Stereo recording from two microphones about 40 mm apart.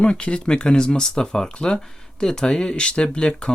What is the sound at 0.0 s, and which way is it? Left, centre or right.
Speech, left.